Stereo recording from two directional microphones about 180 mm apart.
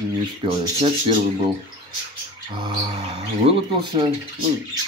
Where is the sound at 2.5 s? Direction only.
30° right (ahead or behind).